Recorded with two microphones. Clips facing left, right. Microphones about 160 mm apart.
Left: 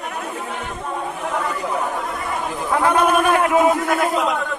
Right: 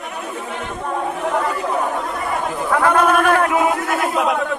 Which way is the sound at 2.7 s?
15° left (ahead or behind).